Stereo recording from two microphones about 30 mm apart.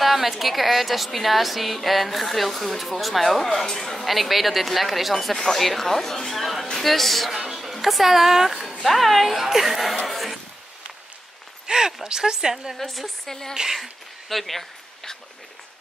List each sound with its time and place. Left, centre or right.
0.0 s a woman's voice: centre
4.1 s a woman's voice: centre
5.3 s a woman's voice: centre
7.3 s speech: centre
8.8 s a woman's voice: centre
10.0 s a sound: centre
11.6 s speech: right
12.7 s a woman's voice: centre
13.3 s a woman's voice: centre